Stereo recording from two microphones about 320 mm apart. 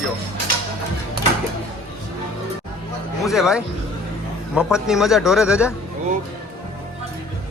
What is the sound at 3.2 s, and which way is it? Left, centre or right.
A man's voice, centre.